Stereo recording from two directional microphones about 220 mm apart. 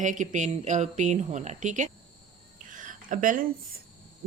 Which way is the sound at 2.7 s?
35° right (ahead or behind).